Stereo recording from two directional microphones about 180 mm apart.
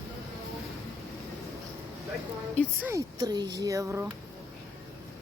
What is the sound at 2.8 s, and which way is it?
Speech, 20° right (ahead or behind).